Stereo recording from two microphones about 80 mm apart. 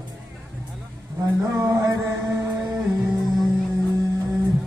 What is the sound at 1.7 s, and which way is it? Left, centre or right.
Music, right.